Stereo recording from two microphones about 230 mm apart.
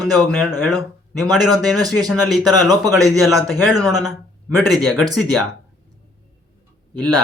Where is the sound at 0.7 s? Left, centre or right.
Centre.